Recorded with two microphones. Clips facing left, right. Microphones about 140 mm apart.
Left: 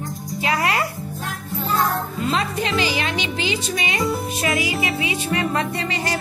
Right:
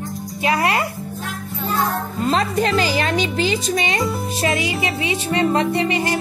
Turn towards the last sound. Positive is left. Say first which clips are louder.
# right 5 dB
turn(degrees=-20)  # may be behind; listen again after turning